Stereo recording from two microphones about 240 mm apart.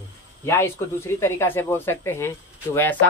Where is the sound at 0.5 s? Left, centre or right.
Centre.